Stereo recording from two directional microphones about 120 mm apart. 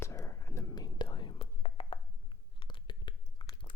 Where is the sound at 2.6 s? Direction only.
40° left (ahead or behind).